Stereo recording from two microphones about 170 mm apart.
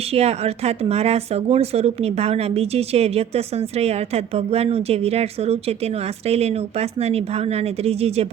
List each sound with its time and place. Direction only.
0.1 s speech: 35° right (ahead or behind)